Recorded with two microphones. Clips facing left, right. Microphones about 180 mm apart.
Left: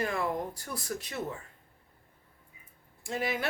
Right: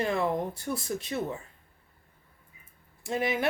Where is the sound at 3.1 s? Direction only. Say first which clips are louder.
Right 4 dB; 25° right (ahead or behind).